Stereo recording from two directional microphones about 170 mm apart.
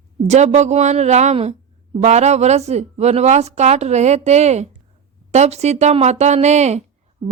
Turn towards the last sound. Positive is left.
turn(degrees=-30)  # may be behind; listen again after turning